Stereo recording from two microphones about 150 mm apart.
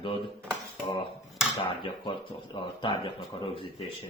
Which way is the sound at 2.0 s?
30° left (ahead or behind).